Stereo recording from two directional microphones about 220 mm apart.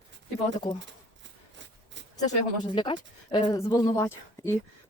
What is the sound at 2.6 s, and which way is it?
Speech, 20° left (ahead or behind).